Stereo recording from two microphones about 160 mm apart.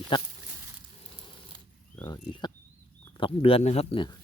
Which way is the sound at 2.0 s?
25° left (ahead or behind).